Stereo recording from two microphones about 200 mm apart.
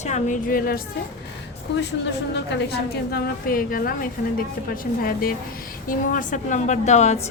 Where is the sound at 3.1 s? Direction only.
45° left (ahead or behind).